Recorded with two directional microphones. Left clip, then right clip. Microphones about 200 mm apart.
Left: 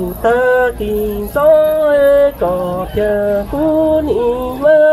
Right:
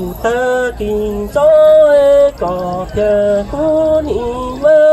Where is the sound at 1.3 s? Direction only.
20° left (ahead or behind).